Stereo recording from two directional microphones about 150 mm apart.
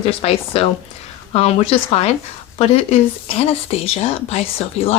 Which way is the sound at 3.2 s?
40° left (ahead or behind).